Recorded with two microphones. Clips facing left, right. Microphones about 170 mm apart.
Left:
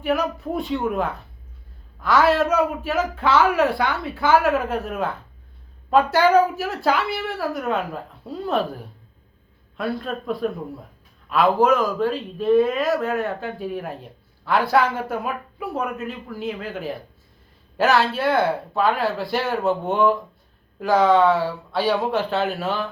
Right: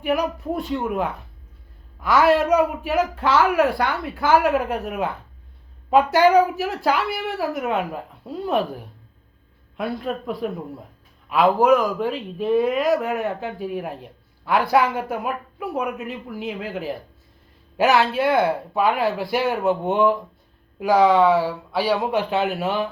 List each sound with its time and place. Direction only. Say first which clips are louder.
0.0 s speech: even; 15° right (ahead or behind)
11.6 s speech: right 1 dB; 15° right (ahead or behind)